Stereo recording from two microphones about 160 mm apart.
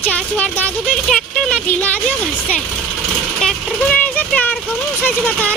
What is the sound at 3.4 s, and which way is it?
Speech, 5° left (ahead or behind).